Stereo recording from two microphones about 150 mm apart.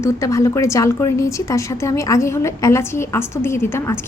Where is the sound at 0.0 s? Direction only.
20° left (ahead or behind).